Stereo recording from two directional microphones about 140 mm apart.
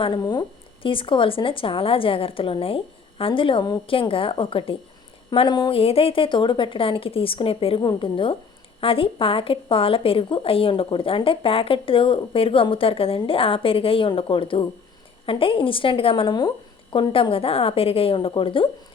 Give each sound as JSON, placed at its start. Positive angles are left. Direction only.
{"t": 0.0, "sound": "a woman's voice", "side_deg": 35}